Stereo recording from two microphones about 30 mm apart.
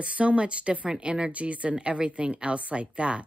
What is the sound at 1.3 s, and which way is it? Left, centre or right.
Speech, right.